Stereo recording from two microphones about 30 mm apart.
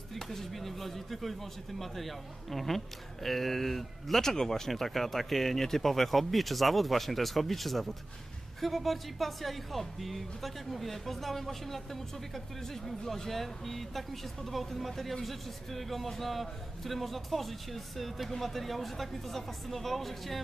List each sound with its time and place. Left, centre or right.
0.1 s speech: centre